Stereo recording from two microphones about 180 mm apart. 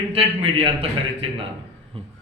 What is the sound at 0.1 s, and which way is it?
Speech, 30° right (ahead or behind).